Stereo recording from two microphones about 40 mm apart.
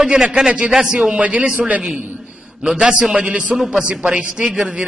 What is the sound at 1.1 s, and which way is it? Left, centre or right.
Speech, right.